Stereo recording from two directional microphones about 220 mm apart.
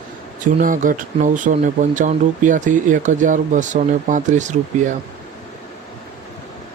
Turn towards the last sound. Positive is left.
turn(degrees=-35)  # may be behind; listen again after turning